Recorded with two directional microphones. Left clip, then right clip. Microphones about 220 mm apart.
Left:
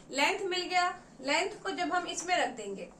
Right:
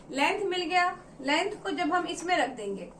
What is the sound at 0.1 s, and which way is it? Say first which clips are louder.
A woman's voice: right 2 dB; 15° left (ahead or behind).